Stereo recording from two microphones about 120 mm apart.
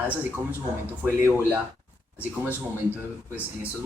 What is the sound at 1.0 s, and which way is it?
Speech, 20° right (ahead or behind).